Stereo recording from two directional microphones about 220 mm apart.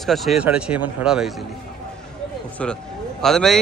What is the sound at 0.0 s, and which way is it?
Speech, centre (ahead or behind).